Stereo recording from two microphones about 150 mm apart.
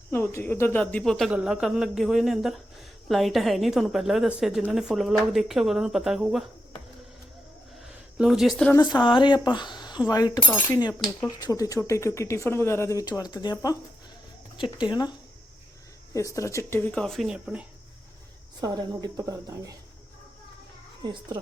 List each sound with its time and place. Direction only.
0.1 s a woman's voice: 15° left (ahead or behind); by 6.4 s centre (ahead or behind)
8.2 s a woman's voice: centre (ahead or behind)
8.7 s speech: 30° left (ahead or behind)
16.1 s speech: 20° left (ahead or behind)
17.0 s a woman's voice: centre (ahead or behind)
18.6 s speech: 25° right (ahead or behind)
21.0 s a child's voice: 30° right (ahead or behind)